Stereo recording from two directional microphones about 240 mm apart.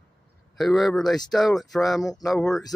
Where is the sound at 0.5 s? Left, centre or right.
Centre.